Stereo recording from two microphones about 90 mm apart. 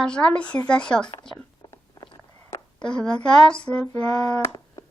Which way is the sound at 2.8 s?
10° left (ahead or behind).